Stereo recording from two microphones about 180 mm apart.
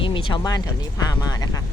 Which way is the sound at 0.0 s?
30° left (ahead or behind).